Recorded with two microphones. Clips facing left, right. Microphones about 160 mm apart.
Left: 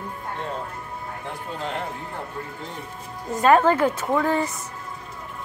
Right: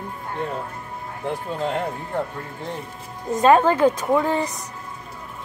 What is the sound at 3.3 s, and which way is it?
A woman's voice, 20° right (ahead or behind).